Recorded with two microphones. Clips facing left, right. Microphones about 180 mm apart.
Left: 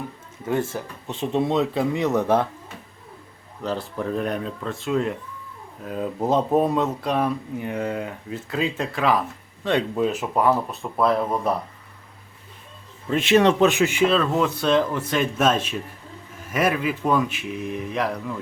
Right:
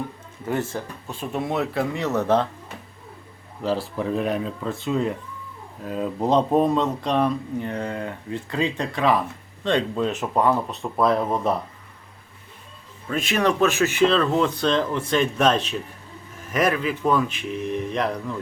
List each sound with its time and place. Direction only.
0.4 s speech: 20° left (ahead or behind)
3.6 s speech: 5° right (ahead or behind)
13.1 s speech: 25° left (ahead or behind); by 18.3 s 5° left (ahead or behind)